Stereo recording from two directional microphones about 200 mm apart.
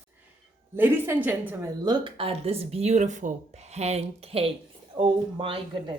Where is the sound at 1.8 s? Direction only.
25° right (ahead or behind).